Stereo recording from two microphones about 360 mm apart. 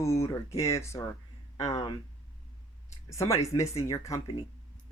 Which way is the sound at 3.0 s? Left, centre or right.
Centre.